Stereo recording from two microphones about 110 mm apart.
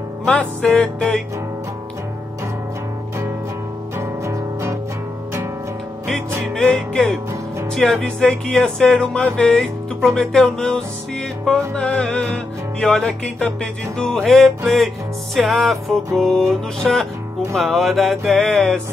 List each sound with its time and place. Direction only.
0.2 s music: 5° left (ahead or behind)
4.0 s music: 25° right (ahead or behind)
6.5 s music: 10° left (ahead or behind)